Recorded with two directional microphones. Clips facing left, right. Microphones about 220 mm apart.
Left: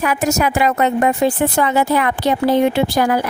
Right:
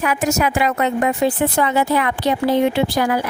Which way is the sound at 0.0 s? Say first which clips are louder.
Left 1 dB; 40° left (ahead or behind).